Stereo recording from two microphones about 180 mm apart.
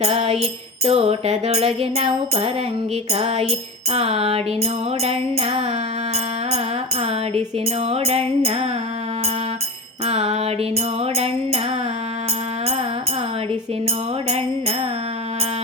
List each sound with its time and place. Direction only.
0.0 s music: 35° right (ahead or behind)
7.9 s music: 35° right (ahead or behind)
10.1 s music: 35° right (ahead or behind)